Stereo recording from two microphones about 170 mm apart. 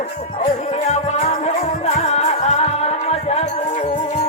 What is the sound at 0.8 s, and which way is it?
Music, 40° left (ahead or behind).